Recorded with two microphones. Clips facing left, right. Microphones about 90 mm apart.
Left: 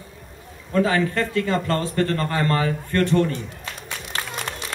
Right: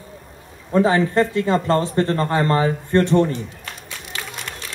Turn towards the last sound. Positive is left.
turn(degrees=40)  # may be behind; listen again after turning